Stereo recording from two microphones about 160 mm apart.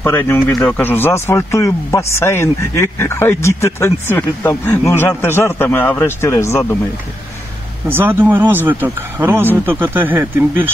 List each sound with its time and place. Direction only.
0.0 s speech: 15° left (ahead or behind)
7.9 s speech: 10° right (ahead or behind)